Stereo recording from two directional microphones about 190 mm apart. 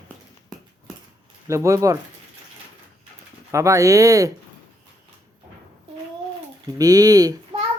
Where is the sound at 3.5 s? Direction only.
15° right (ahead or behind).